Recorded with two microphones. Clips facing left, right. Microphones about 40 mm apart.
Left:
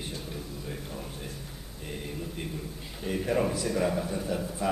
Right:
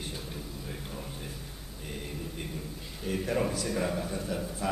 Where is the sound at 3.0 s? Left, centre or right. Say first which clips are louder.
Left 2 dB; centre.